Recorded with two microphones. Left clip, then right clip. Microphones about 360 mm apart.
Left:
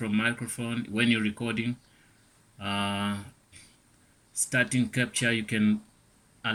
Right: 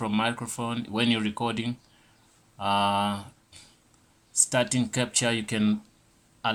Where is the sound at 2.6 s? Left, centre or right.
Right.